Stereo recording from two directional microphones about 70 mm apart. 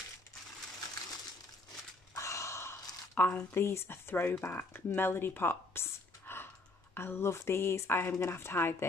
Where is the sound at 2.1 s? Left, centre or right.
Left.